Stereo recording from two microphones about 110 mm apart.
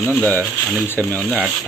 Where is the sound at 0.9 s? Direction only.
15° left (ahead or behind).